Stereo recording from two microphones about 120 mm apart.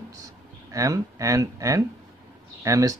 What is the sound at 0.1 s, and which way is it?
Speech, 30° right (ahead or behind).